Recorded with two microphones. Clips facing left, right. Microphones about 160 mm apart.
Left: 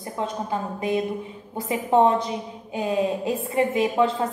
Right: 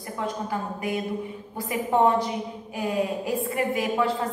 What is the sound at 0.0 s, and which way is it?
A woman's voice, 25° left (ahead or behind).